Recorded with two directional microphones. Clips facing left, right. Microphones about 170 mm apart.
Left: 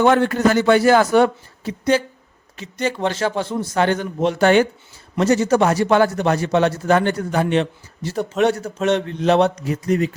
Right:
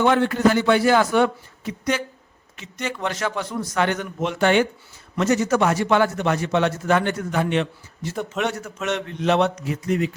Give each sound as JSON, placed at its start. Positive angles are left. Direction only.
{"t": 0.0, "sound": "a man's voice", "side_deg": 45}